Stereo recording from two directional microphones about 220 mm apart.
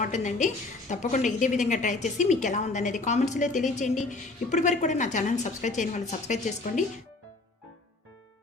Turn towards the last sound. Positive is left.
turn(degrees=30)  # may be behind; listen again after turning